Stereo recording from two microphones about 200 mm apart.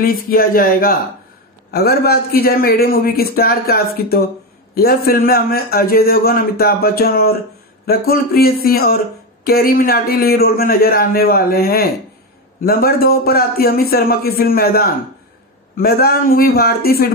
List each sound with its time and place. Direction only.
0.0 s a man's voice: 45° left (ahead or behind)